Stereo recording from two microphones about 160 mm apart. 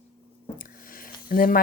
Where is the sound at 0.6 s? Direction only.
60° left (ahead or behind).